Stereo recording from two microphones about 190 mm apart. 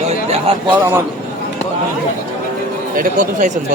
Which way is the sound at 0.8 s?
10° right (ahead or behind).